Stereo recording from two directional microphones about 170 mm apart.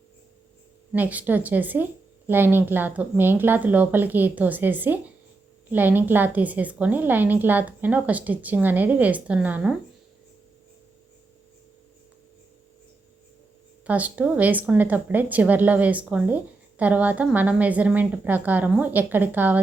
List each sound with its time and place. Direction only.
0.9 s speech: 10° right (ahead or behind)
13.8 s speech: 10° right (ahead or behind)